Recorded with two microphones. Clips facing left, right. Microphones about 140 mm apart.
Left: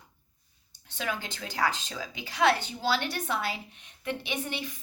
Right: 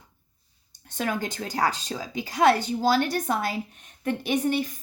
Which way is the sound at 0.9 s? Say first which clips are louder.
Right 6 dB; 45° right (ahead or behind).